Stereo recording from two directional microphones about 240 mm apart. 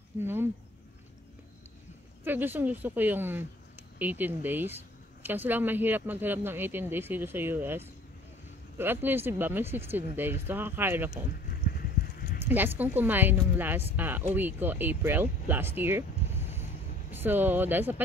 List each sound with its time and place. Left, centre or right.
0.2 s speech: centre
2.2 s speech: centre
12.0 s clip-clop: left
12.4 s speech: centre
17.1 s speech: centre